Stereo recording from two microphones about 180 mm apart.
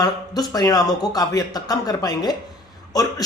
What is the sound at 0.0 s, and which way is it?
Speech, 20° left (ahead or behind).